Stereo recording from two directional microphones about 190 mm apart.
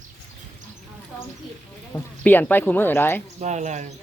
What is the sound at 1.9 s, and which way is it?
Speech, 10° left (ahead or behind).